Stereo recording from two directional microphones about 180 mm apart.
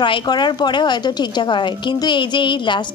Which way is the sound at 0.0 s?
25° left (ahead or behind).